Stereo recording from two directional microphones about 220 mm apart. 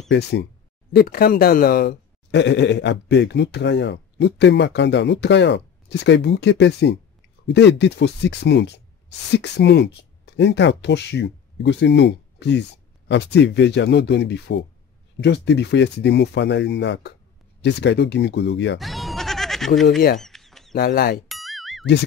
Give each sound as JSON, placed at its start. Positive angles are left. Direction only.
{"t": 0.1, "sound": "speech", "side_deg": 50}
{"t": 18.8, "sound": "goat", "side_deg": 0}
{"t": 20.2, "sound": "a sound", "side_deg": 0}
{"t": 20.7, "sound": "speech", "side_deg": 45}
{"t": 21.3, "sound": "boing", "side_deg": 0}